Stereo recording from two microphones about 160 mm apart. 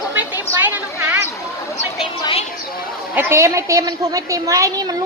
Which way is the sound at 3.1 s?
15° right (ahead or behind).